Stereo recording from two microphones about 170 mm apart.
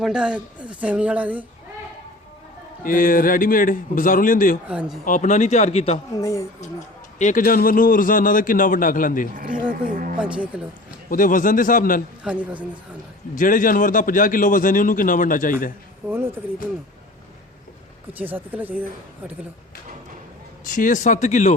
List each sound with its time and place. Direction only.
0.0 s speech: 5° right (ahead or behind)
2.8 s a man's voice: 55° left (ahead or behind)
4.7 s speech: 5° right (ahead or behind)
5.0 s a man's voice: 50° left (ahead or behind)
6.1 s a woman's voice: 20° left (ahead or behind)
7.2 s a man's voice: 50° left (ahead or behind)
9.8 s speech: 55° right (ahead or behind)
10.2 s speech: 5° right (ahead or behind)
11.1 s a man's voice: 50° left (ahead or behind)
12.2 s speech: 5° right (ahead or behind)
13.3 s a man's voice: 50° left (ahead or behind)
16.0 s speech: 10° right (ahead or behind)
18.2 s speech: 10° right (ahead or behind)
20.7 s a man's voice: 50° left (ahead or behind)